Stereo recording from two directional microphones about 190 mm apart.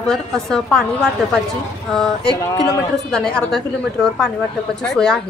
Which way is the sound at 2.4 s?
15° left (ahead or behind).